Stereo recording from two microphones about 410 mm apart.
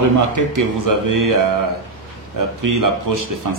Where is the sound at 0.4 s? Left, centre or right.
Right.